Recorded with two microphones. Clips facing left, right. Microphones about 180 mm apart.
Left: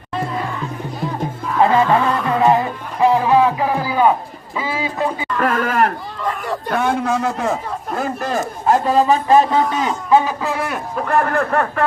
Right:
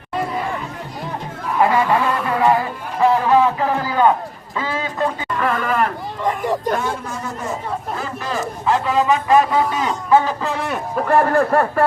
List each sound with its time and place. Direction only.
1.6 s music: 25° left (ahead or behind)
5.4 s a sound: 45° left (ahead or behind)
6.2 s a sound: 15° right (ahead or behind)
6.7 s speech: 65° left (ahead or behind)
7.9 s a man's voice: 50° left (ahead or behind); by 9.9 s 30° left (ahead or behind)
10.1 s a man's voice: 10° left (ahead or behind); by 11.9 s 10° right (ahead or behind)